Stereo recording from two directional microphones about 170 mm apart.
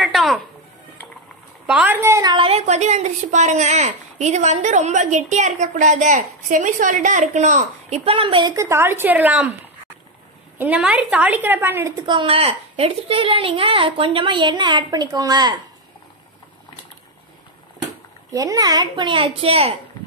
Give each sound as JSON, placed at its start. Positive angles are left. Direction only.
{"t": 0.0, "sound": "music", "side_deg": 0}
{"t": 1.7, "sound": "a woman's voice", "side_deg": -10}
{"t": 2.3, "sound": "speech", "side_deg": -35}
{"t": 10.6, "sound": "a woman's voice", "side_deg": -10}
{"t": 12.1, "sound": "a woman's voice", "side_deg": -30}
{"t": 18.3, "sound": "a woman's voice", "side_deg": -20}